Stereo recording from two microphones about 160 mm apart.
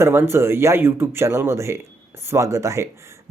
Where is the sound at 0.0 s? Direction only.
15° right (ahead or behind).